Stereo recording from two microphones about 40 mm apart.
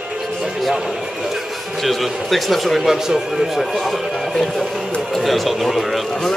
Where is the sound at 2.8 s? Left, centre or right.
Centre.